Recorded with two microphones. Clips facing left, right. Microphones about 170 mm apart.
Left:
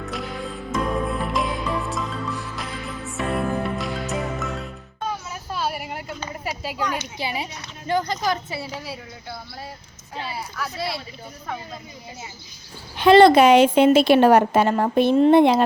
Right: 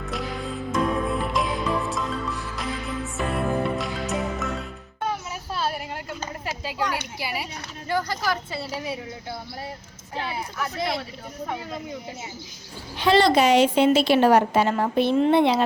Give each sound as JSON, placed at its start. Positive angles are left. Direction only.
{"t": 0.0, "sound": "music", "side_deg": 0}
{"t": 5.3, "sound": "a sound", "side_deg": 0}
{"t": 7.2, "sound": "speech", "side_deg": 25}
{"t": 13.0, "sound": "a woman's voice", "side_deg": 55}